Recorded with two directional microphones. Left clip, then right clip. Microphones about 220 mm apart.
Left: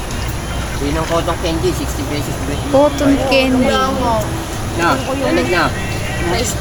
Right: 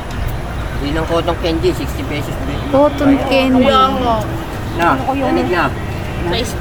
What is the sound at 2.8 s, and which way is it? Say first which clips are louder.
Speech: even; 10° right (ahead or behind).